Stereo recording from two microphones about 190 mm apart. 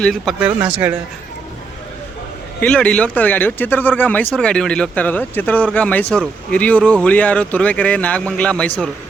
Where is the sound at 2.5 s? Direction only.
5° left (ahead or behind).